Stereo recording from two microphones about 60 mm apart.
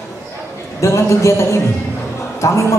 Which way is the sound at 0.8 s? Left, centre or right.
Left.